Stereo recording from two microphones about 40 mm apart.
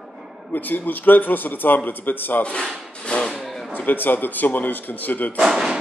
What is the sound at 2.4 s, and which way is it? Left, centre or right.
Speech, left.